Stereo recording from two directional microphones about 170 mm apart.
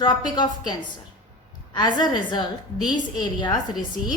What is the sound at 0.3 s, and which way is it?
A woman's voice, 25° left (ahead or behind).